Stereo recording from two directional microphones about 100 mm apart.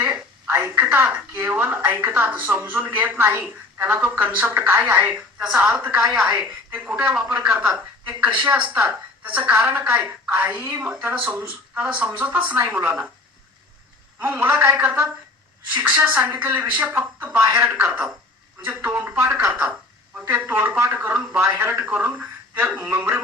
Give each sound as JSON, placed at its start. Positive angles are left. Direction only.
{"t": 0.0, "sound": "speech", "side_deg": -20}
{"t": 7.2, "sound": "speech", "side_deg": -15}
{"t": 14.2, "sound": "speech", "side_deg": -20}